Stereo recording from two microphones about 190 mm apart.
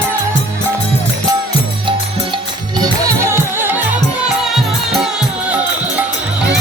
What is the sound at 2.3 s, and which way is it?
Music, 20° right (ahead or behind).